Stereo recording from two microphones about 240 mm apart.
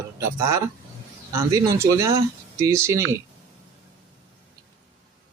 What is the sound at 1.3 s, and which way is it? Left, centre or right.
Speech, centre.